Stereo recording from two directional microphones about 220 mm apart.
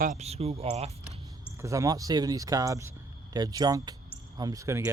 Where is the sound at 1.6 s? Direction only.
15° right (ahead or behind).